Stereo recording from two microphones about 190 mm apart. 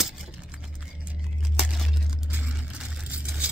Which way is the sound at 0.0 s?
5° right (ahead or behind).